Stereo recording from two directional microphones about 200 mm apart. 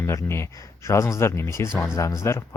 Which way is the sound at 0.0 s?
15° left (ahead or behind).